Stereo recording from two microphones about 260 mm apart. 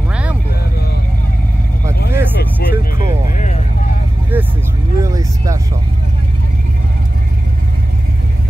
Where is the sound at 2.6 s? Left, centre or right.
Left.